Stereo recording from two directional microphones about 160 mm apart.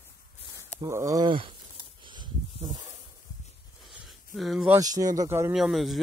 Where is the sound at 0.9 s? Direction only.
20° right (ahead or behind).